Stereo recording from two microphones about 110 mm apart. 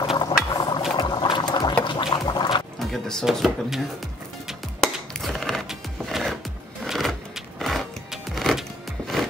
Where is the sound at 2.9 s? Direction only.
5° left (ahead or behind).